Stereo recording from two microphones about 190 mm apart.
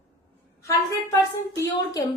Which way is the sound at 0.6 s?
15° left (ahead or behind).